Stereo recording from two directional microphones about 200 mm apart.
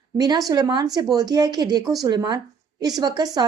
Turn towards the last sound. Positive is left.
turn(degrees=-20)  # may be behind; listen again after turning